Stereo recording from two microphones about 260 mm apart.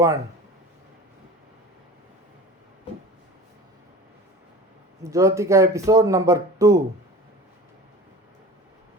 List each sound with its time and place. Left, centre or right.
5.1 s speech: centre